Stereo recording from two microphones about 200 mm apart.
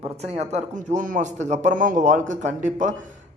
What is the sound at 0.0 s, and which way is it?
A man's voice, 35° right (ahead or behind).